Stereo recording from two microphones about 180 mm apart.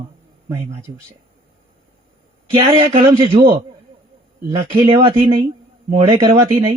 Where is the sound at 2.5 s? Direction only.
30° right (ahead or behind).